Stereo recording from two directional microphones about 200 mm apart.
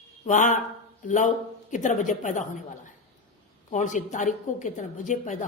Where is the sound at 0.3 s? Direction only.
40° left (ahead or behind).